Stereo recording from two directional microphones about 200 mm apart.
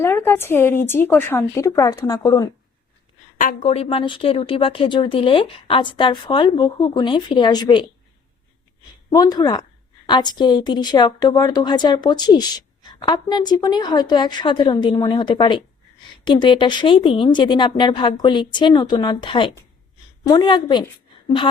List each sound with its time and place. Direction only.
0.0 s a woman's voice: 10° left (ahead or behind)
3.3 s speech: 40° left (ahead or behind); by 7.9 s 20° left (ahead or behind)
9.1 s a woman's voice: 20° left (ahead or behind)